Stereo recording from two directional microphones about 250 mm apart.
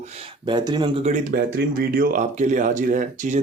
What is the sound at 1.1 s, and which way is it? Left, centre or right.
Speech, right.